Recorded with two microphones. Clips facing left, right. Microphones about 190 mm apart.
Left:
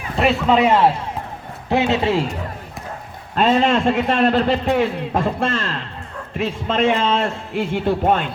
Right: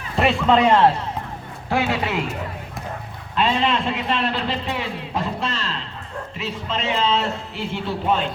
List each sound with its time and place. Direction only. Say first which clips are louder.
0.2 s a man's voice: left 1 dB; 5° left (ahead or behind)
1.7 s a man's voice: left 5 dB; 25° left (ahead or behind)
3.3 s a man's voice: left 5 dB; 45° left (ahead or behind)